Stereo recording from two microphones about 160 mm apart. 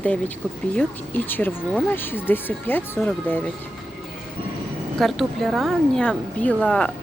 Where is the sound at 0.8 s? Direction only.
10° left (ahead or behind).